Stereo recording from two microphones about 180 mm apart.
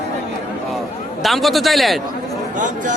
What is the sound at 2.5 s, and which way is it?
Speech, 45° right (ahead or behind).